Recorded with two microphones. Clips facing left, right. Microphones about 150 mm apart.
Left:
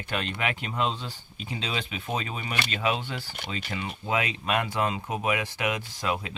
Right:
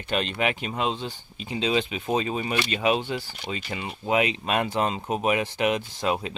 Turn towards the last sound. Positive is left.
turn(degrees=-25)  # may be behind; listen again after turning